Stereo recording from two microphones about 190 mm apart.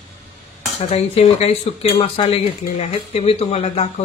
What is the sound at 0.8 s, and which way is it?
Speech, 35° left (ahead or behind).